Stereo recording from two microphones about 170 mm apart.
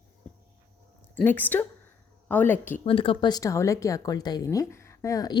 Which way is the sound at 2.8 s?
30° left (ahead or behind).